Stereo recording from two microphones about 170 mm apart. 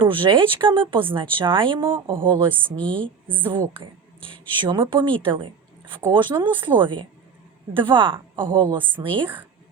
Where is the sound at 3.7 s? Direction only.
30° right (ahead or behind).